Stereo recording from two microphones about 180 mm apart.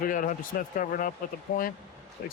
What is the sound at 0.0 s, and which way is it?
Speech, 50° left (ahead or behind).